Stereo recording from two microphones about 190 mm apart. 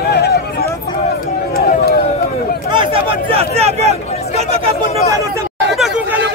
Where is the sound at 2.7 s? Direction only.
25° right (ahead or behind).